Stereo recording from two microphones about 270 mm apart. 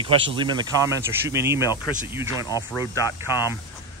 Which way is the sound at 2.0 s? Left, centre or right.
Centre.